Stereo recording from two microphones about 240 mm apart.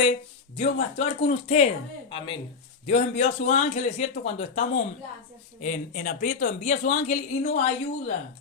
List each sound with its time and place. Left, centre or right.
0.0 s speech: left